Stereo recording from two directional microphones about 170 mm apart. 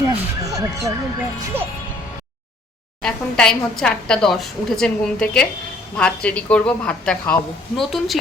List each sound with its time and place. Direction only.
0.0 s music: 20° right (ahead or behind)
1.5 s speech: 10° right (ahead or behind)
3.0 s a woman's voice: 5° left (ahead or behind)